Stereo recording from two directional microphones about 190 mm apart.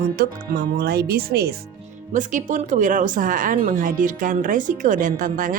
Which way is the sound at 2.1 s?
40° right (ahead or behind).